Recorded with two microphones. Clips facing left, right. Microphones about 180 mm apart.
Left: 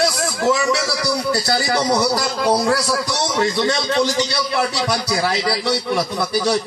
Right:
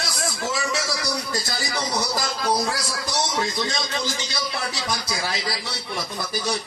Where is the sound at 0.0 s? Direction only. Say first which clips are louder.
Left 10 dB; 70° left (ahead or behind).